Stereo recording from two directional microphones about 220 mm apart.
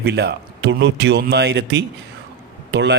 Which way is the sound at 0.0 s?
50° right (ahead or behind).